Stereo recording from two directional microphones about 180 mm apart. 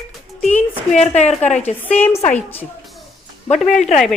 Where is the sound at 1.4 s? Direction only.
5° left (ahead or behind).